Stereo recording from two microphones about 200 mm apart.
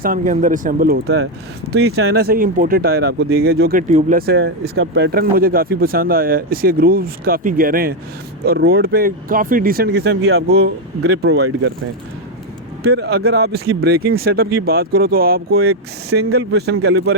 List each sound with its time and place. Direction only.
0.0 s speech: 40° right (ahead or behind)
4.3 s speech: 55° right (ahead or behind)
11.0 s speech: 75° right (ahead or behind)
12.8 s speech: 90° right
13.1 s speech: 55° right (ahead or behind)